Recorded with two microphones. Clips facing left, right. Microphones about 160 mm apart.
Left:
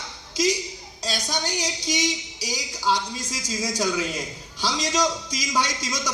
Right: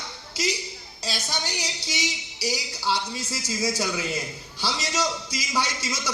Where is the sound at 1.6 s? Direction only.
10° right (ahead or behind).